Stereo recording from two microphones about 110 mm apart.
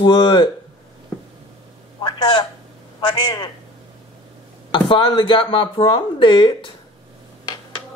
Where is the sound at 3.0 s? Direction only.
45° left (ahead or behind).